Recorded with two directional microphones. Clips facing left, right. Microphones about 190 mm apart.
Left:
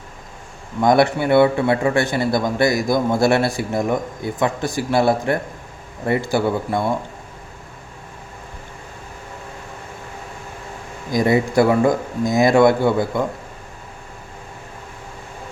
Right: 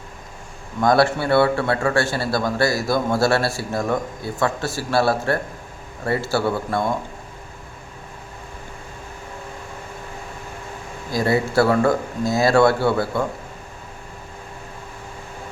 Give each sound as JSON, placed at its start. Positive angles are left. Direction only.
{"t": 0.8, "sound": "a man's voice", "side_deg": 20}
{"t": 11.1, "sound": "a man's voice", "side_deg": 20}